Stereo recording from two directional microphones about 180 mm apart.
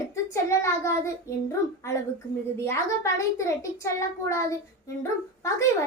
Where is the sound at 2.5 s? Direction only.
15° left (ahead or behind).